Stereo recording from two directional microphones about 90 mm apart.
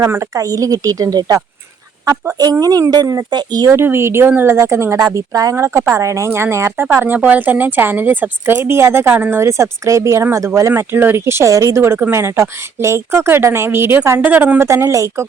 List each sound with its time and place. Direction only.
0.0 s speech: 35° right (ahead or behind)
3.7 s a woman's voice: 30° right (ahead or behind)
5.1 s speech: 40° right (ahead or behind)
5.5 s speech: 30° right (ahead or behind)
6.8 s a woman's voice: 20° right (ahead or behind)
14.7 s speech: 30° right (ahead or behind)